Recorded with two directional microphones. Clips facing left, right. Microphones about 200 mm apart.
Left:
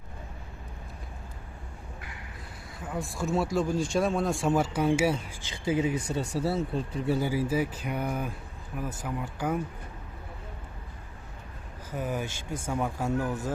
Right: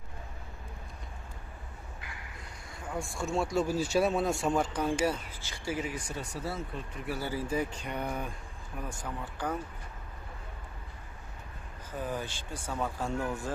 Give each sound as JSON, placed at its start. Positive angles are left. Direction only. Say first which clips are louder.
{"t": 2.8, "sound": "speech", "louder": "left 3 dB", "side_deg": 0}
{"t": 7.2, "sound": "speech", "louder": "left 1 dB", "side_deg": 10}
{"t": 11.9, "sound": "speech", "louder": "left 3 dB", "side_deg": 10}